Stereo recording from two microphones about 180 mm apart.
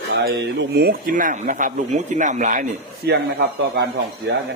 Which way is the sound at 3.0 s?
65° right (ahead or behind).